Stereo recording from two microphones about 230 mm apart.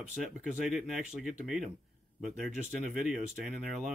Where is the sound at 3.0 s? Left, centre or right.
Centre.